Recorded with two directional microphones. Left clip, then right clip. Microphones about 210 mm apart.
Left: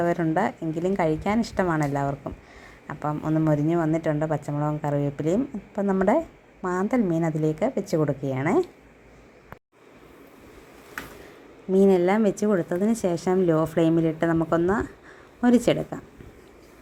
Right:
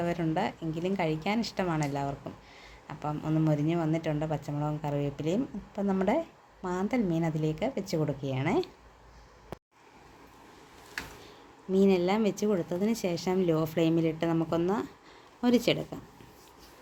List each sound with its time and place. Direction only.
0.0 s a woman's voice: 15° left (ahead or behind)
5.8 s a woman's voice: 5° left (ahead or behind)
6.1 s a sound: 15° left (ahead or behind)
6.8 s a woman's voice: 15° left (ahead or behind)
11.7 s a woman's voice: 15° left (ahead or behind)